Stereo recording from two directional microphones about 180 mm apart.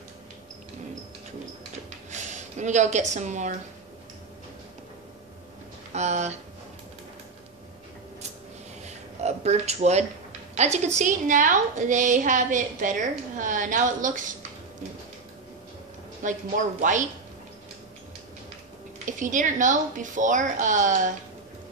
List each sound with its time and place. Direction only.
2.0 s speech: 40° right (ahead or behind)
5.9 s speech: 40° right (ahead or behind)
8.8 s a sound: 35° right (ahead or behind)
10.5 s a woman's voice: 40° right (ahead or behind)
16.2 s a woman's voice: 45° right (ahead or behind)
19.0 s a woman's voice: 45° right (ahead or behind)